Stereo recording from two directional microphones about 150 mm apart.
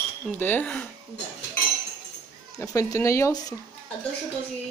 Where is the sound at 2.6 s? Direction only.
20° left (ahead or behind).